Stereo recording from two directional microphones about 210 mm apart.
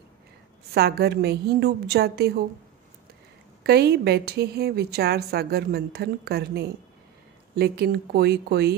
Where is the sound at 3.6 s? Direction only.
50° right (ahead or behind).